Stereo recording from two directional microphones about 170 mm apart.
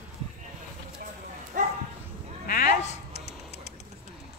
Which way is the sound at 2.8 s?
40° left (ahead or behind).